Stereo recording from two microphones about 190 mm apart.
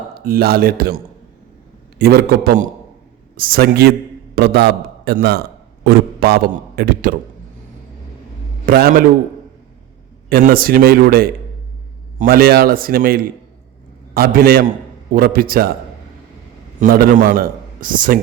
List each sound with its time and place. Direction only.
0.3 s a man's voice: 55° right (ahead or behind)
8.6 s a man's voice: 50° right (ahead or behind)
10.2 s a man's voice: 50° right (ahead or behind)
16.8 s a man's voice: 50° right (ahead or behind)